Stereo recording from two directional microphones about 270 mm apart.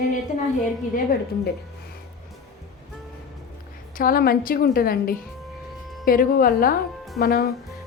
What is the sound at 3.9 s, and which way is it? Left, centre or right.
A woman's voice, left.